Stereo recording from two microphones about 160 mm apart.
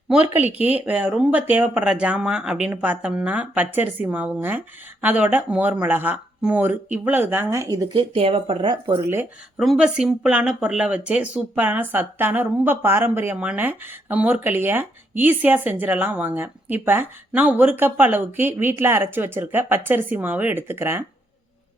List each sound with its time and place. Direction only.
0.1 s speech: 10° right (ahead or behind)
8.1 s speech: 35° right (ahead or behind)
9.6 s speech: 5° right (ahead or behind)